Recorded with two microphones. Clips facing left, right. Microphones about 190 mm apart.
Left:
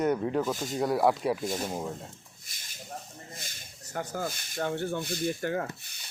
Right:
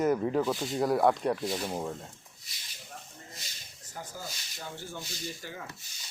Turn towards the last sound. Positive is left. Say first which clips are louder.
# left 10 dB
turn(degrees=60)  # may be behind; listen again after turning